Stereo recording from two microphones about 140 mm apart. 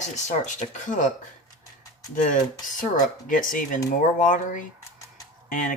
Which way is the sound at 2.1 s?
70° left (ahead or behind).